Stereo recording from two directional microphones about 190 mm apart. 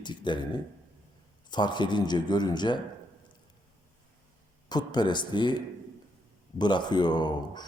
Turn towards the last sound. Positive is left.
turn(degrees=20)  # may be behind; listen again after turning